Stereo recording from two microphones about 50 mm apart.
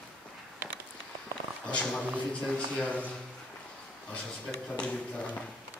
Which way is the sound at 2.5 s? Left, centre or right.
Left.